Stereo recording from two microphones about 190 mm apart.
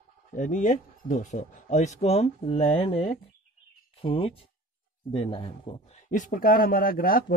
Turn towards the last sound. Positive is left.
turn(degrees=50)  # may be behind; listen again after turning